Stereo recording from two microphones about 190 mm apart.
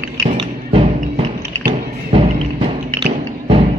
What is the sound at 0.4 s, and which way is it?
Music, 30° right (ahead or behind).